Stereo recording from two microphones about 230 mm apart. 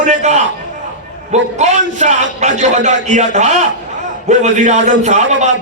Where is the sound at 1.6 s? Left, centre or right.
Right.